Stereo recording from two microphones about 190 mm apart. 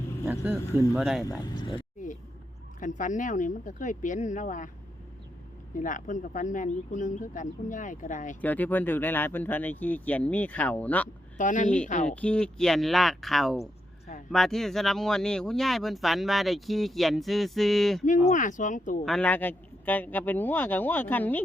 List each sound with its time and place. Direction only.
0.3 s speech: 10° right (ahead or behind)
1.2 s speech: 20° left (ahead or behind)
2.8 s speech: 40° left (ahead or behind)
5.7 s speech: 45° left (ahead or behind)
8.4 s speech: 10° left (ahead or behind)
11.3 s speech: 40° left (ahead or behind)
12.0 s speech: 5° left (ahead or behind)
18.3 s speech: 40° left (ahead or behind)
19.0 s speech: 5° left (ahead or behind)